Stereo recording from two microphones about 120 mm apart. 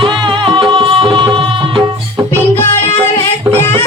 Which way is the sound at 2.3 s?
20° left (ahead or behind).